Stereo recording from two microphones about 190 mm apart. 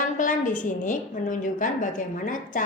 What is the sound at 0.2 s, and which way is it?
A woman's voice, 45° left (ahead or behind).